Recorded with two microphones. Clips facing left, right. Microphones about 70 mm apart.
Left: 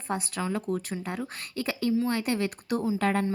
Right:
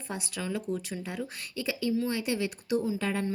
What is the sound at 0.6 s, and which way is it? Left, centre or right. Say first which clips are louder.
A woman's voice: left 3 dB; left.